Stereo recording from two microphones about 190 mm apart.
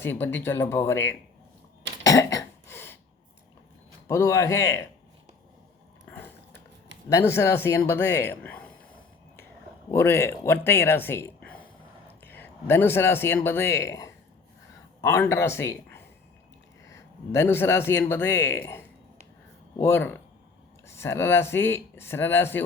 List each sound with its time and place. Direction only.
0.0 s speech: 10° left (ahead or behind)
2.0 s cough: 15° left (ahead or behind)
4.1 s speech: 15° left (ahead or behind)
6.1 s a sound: 10° left (ahead or behind)
7.1 s speech: 15° left (ahead or behind)
9.9 s a man's voice: 10° left (ahead or behind)